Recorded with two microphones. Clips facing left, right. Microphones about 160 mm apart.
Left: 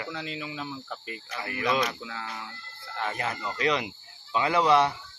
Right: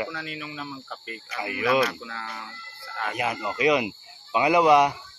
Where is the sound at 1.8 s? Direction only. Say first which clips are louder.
Right 3 dB; 15° left (ahead or behind).